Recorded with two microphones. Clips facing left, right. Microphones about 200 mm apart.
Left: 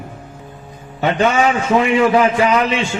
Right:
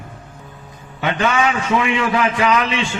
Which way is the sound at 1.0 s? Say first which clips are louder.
Left 4 dB; 35° left (ahead or behind).